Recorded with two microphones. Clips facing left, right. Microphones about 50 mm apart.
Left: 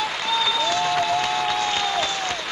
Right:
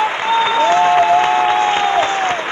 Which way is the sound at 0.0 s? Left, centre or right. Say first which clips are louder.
Right 8 dB; right.